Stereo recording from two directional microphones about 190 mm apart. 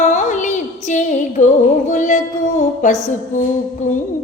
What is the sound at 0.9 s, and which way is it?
Female singing, 40° left (ahead or behind).